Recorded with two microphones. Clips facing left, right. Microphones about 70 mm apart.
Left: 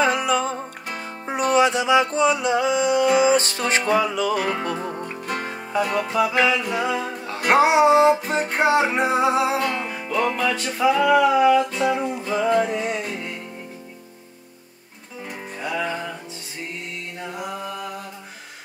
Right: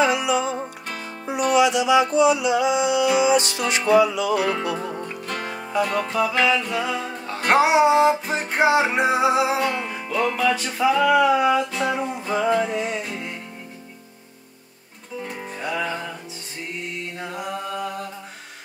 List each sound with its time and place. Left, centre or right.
0.0 s music: left
5.2 s music: centre
15.2 s music: centre
17.4 s mantra: centre